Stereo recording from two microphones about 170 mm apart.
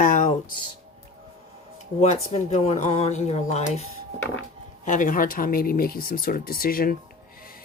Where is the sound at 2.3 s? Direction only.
40° left (ahead or behind).